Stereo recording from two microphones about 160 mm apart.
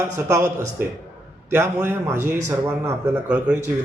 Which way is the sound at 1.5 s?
15° right (ahead or behind).